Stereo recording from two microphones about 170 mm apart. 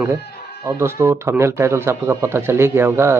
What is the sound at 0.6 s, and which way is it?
Speech, 15° right (ahead or behind).